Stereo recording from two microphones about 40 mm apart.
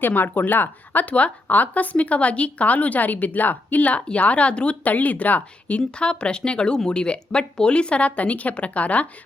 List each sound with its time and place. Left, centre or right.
0.1 s speech: left
1.0 s a woman's voice: left